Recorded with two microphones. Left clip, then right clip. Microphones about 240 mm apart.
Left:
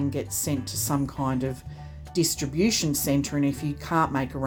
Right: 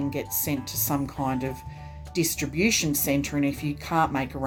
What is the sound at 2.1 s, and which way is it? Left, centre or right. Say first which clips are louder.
Speech: left 1 dB; left.